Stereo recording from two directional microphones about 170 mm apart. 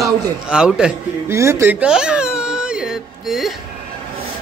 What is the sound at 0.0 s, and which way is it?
Speech, 5° right (ahead or behind).